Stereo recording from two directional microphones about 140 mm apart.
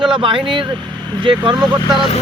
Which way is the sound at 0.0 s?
40° right (ahead or behind).